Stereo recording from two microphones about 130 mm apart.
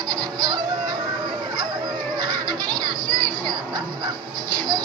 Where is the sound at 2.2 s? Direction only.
30° right (ahead or behind).